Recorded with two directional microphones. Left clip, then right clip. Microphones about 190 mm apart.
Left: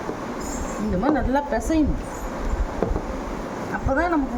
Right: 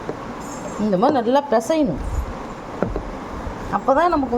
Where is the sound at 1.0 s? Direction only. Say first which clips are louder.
Right 5 dB; 40° right (ahead or behind).